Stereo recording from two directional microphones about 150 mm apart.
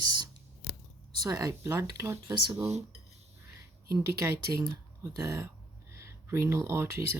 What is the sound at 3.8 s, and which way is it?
Speech, 20° right (ahead or behind).